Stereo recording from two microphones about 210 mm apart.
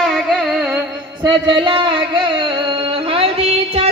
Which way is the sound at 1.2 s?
20° right (ahead or behind).